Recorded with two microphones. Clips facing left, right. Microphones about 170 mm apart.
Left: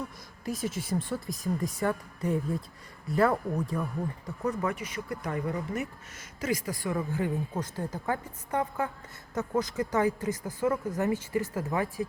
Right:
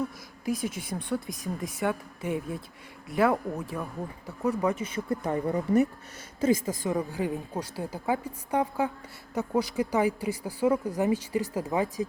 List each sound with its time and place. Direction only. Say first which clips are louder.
0.4 s a woman's voice: right 2 dB; centre (ahead or behind)
4.7 s speech: right 5 dB; 30° right (ahead or behind)
6.4 s speech: right 6 dB; 25° right (ahead or behind)